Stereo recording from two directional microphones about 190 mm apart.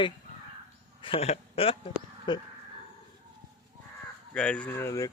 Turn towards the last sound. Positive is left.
turn(degrees=15)  # may be behind; listen again after turning